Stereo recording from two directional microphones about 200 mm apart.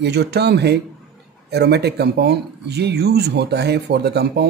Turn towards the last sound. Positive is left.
turn(degrees=-55)  # may be behind; listen again after turning